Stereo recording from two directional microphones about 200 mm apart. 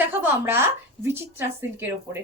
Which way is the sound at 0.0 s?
10° right (ahead or behind).